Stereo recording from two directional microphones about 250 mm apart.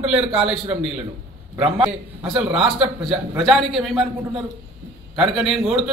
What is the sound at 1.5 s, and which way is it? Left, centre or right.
Speech, centre.